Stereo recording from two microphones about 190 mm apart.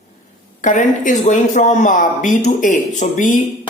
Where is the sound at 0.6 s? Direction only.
45° left (ahead or behind).